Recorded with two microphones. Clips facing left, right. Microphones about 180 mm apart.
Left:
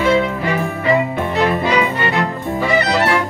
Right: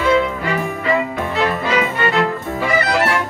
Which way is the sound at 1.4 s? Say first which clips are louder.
Left 2 dB; 15° left (ahead or behind).